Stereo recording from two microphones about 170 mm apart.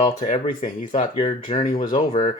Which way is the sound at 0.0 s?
45° left (ahead or behind).